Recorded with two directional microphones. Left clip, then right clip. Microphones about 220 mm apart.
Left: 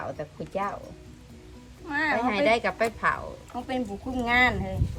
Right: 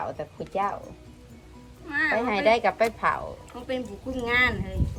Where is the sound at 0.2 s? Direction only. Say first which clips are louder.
Right 3 dB; 15° right (ahead or behind).